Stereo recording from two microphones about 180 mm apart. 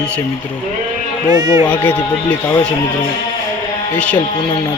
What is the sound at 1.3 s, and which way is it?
Speech, 20° right (ahead or behind).